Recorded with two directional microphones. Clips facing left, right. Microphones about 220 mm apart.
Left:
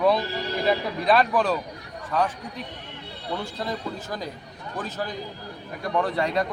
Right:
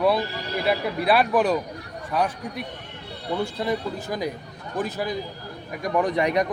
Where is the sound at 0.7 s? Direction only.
10° right (ahead or behind).